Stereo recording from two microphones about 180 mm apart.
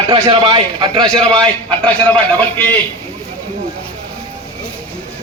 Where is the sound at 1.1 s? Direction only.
5° left (ahead or behind).